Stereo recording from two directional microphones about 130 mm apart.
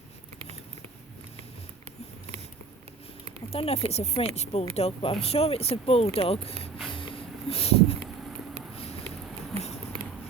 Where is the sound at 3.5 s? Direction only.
50° left (ahead or behind).